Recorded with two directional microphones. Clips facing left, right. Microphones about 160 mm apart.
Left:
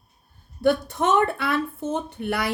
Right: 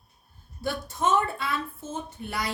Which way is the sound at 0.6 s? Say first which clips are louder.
Left 7 dB; 65° left (ahead or behind).